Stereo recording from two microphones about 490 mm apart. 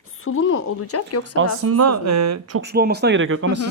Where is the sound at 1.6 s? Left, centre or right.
Right.